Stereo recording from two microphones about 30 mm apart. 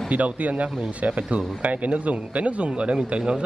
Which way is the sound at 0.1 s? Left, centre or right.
Right.